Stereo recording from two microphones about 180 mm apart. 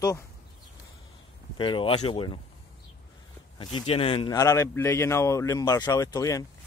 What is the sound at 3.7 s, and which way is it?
Speech, 30° left (ahead or behind).